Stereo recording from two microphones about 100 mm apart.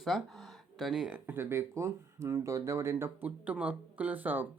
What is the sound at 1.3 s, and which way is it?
Speech, 25° right (ahead or behind).